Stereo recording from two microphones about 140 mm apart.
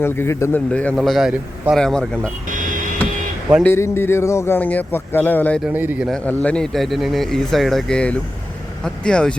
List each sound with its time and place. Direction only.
0.0 s a man's voice: 20° left (ahead or behind)
0.7 s speech: 10° left (ahead or behind)
2.5 s vehicle: 70° right (ahead or behind)
3.6 s a man's voice: 20° left (ahead or behind)
5.6 s a man's voice: 15° right (ahead or behind)
6.1 s speech: 10° left (ahead or behind)